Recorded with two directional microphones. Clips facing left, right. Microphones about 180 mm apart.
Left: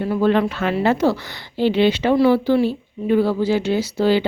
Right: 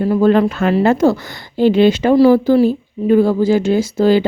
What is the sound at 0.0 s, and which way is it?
Speech, 40° right (ahead or behind).